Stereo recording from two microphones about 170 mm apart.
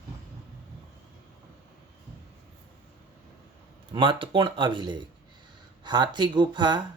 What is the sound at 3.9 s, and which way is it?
Speech, 30° right (ahead or behind).